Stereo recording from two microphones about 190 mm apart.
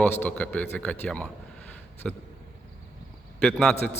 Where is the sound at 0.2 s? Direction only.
5° left (ahead or behind).